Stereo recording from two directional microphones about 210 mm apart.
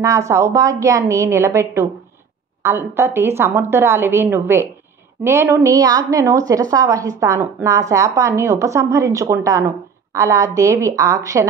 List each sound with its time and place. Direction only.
0.3 s a woman's voice: 15° right (ahead or behind)